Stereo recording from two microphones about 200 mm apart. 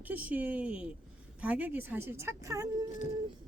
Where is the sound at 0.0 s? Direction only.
10° right (ahead or behind).